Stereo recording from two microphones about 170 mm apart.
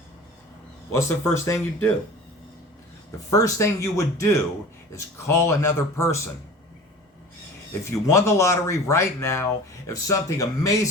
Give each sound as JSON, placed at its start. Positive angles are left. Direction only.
{"t": 0.9, "sound": "speech", "side_deg": 15}
{"t": 3.2, "sound": "speech", "side_deg": 20}
{"t": 7.9, "sound": "speech", "side_deg": 15}